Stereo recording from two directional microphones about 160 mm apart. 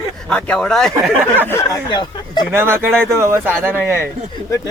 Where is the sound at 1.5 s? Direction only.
25° left (ahead or behind).